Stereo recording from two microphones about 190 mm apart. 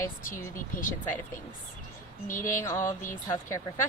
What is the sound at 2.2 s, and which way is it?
Speech, 45° left (ahead or behind).